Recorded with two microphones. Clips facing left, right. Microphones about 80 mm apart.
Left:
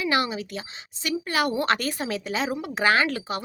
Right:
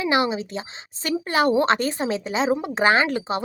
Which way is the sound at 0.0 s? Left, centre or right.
Right.